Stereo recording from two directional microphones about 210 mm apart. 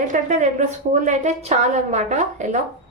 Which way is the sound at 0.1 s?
35° right (ahead or behind).